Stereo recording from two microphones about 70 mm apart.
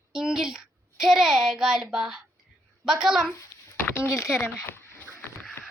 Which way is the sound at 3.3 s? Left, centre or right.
Left.